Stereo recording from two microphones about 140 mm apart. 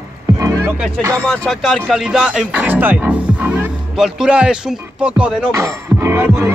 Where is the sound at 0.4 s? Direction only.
25° right (ahead or behind).